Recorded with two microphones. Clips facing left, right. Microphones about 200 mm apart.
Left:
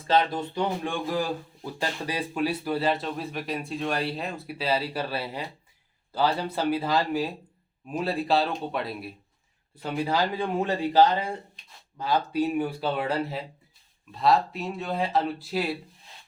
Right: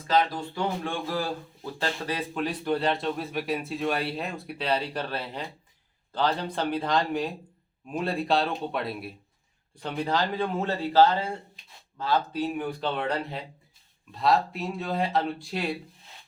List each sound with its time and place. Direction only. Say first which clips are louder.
0.1 s speech: left 1 dB; 25° left (ahead or behind); by 15.8 s 5° left (ahead or behind)